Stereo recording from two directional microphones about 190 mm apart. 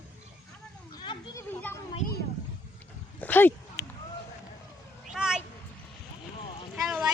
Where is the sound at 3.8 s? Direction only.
60° left (ahead or behind).